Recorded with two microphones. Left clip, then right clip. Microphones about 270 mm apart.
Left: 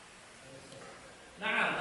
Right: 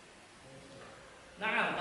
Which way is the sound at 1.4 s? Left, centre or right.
Centre.